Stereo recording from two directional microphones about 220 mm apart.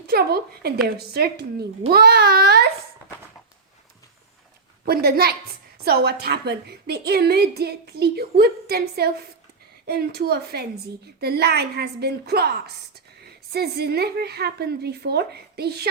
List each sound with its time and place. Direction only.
0.1 s a woman's voice: 45° right (ahead or behind)
4.9 s a woman's voice: 45° right (ahead or behind)